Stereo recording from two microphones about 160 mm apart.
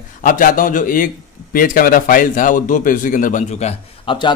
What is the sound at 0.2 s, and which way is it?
A man's voice, 55° left (ahead or behind).